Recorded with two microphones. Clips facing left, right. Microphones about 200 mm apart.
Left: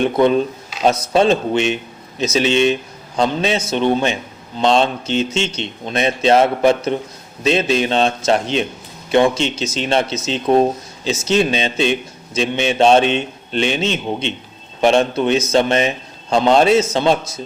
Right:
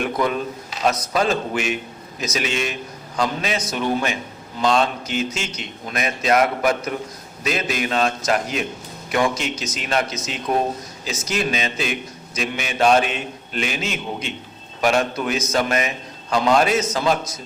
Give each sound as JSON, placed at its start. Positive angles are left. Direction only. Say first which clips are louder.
{"t": 0.0, "sound": "a man's voice", "louder": "left 8 dB", "side_deg": 30}